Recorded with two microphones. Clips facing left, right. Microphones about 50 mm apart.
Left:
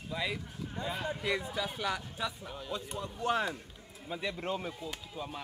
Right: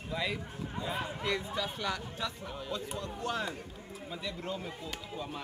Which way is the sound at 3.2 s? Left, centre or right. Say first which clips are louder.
Left 5 dB; left.